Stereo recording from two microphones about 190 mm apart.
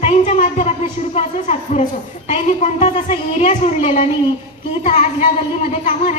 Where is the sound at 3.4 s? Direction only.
40° left (ahead or behind).